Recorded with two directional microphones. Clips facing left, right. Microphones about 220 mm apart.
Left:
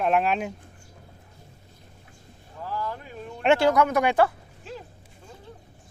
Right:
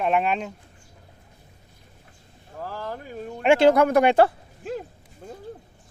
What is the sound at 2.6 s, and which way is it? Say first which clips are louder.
Vehicle: left 1 dB; 40° right (ahead or behind).